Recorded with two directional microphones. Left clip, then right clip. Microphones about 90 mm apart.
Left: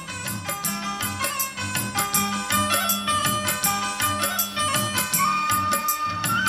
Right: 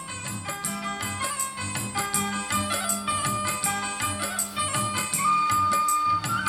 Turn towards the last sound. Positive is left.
turn(degrees=25)  # may be behind; listen again after turning